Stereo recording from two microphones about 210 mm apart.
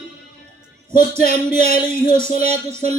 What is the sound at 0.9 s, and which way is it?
Speech, 40° left (ahead or behind).